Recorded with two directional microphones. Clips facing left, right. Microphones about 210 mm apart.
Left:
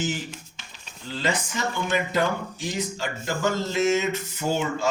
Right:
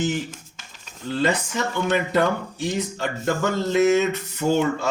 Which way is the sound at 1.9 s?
60° right (ahead or behind).